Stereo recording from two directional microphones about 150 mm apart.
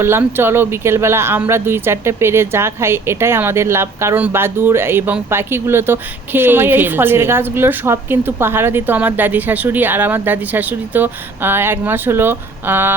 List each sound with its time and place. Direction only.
0.0 s speech: 15° right (ahead or behind)